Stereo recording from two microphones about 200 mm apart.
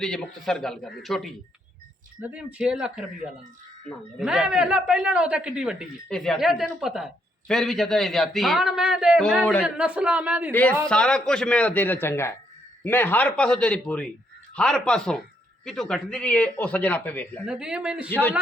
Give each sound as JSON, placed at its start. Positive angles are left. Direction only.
{"t": 0.0, "sound": "a man's voice", "side_deg": 5}
{"t": 10.5, "sound": "a man's voice", "side_deg": 10}
{"t": 17.5, "sound": "a man's voice", "side_deg": -5}
{"t": 18.1, "sound": "a man's voice", "side_deg": 10}